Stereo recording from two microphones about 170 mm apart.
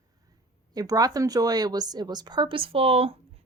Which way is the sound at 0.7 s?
20° right (ahead or behind).